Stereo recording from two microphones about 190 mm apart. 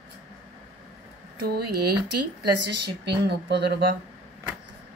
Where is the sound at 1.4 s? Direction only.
55° right (ahead or behind).